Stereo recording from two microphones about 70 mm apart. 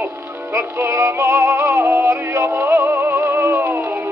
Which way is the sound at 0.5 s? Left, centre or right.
Right.